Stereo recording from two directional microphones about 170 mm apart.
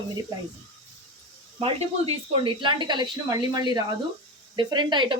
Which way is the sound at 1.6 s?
35° right (ahead or behind).